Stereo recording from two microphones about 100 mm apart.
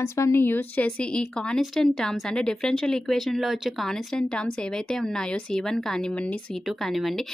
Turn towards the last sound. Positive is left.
turn(degrees=0)  # may be behind; listen again after turning